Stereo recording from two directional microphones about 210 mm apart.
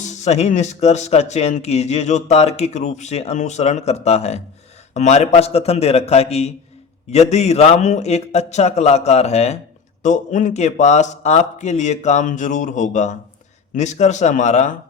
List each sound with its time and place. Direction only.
0.0 s speech: 35° left (ahead or behind)